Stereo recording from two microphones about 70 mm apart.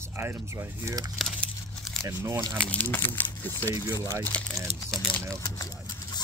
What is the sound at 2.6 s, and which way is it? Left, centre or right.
Speech, left.